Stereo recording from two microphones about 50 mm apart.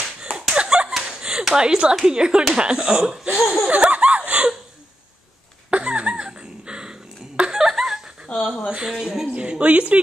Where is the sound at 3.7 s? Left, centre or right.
Right.